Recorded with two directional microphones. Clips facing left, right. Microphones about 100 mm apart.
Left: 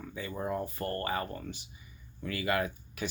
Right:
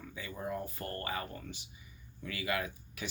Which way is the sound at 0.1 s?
45° left (ahead or behind).